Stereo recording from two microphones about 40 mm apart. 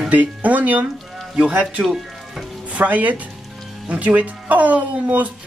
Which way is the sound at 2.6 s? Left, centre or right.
Right.